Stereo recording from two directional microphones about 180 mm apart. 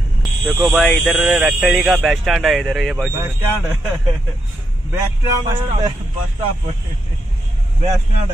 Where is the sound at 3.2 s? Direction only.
10° right (ahead or behind).